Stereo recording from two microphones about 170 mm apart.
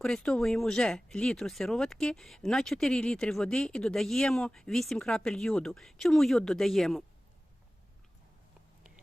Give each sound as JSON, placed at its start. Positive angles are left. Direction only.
{"t": 0.0, "sound": "speech", "side_deg": 0}